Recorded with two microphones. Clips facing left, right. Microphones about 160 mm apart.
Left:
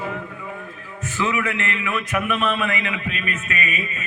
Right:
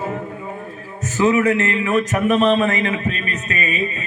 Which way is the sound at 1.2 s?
40° right (ahead or behind).